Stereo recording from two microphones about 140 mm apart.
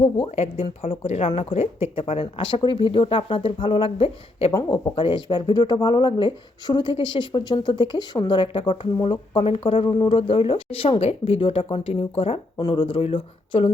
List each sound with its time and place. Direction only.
0.6 s speech: 45° left (ahead or behind)